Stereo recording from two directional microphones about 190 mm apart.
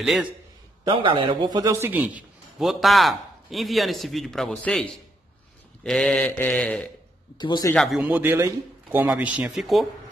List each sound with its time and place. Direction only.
0.0 s a man's voice: 5° right (ahead or behind)
0.8 s a man's voice: 30° right (ahead or behind); by 4.8 s 5° left (ahead or behind)
5.9 s a man's voice: 5° left (ahead or behind)
7.3 s a man's voice: 20° left (ahead or behind)
7.7 s a man's voice: centre (ahead or behind)